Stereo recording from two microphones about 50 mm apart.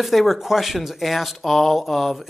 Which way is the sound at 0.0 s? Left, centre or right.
Centre.